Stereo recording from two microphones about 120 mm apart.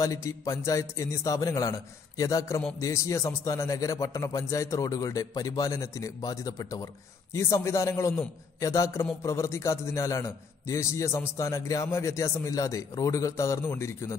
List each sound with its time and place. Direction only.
0.0 s a man's voice: 25° left (ahead or behind)